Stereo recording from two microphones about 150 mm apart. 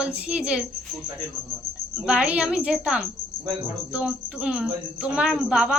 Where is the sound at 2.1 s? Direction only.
5° right (ahead or behind).